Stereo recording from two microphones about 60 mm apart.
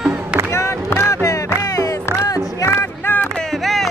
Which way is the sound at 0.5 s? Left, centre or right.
Left.